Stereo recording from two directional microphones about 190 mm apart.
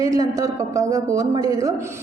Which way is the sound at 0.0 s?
20° right (ahead or behind).